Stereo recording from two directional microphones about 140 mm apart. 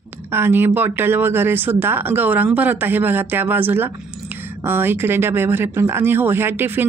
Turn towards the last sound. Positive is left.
turn(degrees=-15)  # may be behind; listen again after turning